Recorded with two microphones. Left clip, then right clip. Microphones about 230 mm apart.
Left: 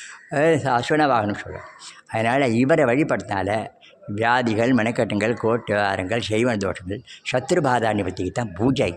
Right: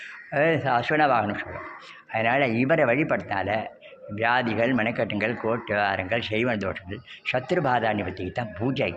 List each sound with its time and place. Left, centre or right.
0.3 s speech: left